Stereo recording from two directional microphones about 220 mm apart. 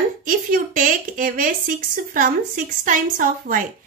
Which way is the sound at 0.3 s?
40° right (ahead or behind).